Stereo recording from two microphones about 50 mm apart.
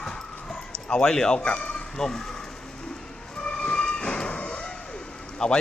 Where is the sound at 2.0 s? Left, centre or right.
Centre.